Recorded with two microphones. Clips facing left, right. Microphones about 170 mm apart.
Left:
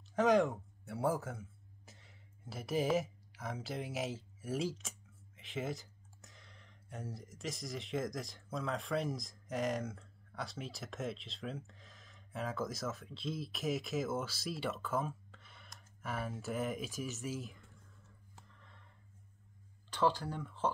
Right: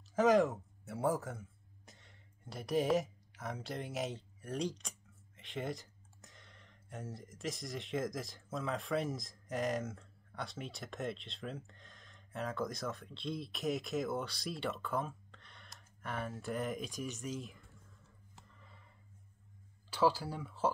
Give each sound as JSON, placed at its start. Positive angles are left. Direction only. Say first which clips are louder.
{"t": 0.0, "sound": "a man's voice", "louder": "right 1 dB", "side_deg": 0}
{"t": 18.5, "sound": "a sound", "louder": "right 1 dB", "side_deg": -5}
{"t": 19.9, "sound": "speech", "louder": "right 1 dB", "side_deg": -5}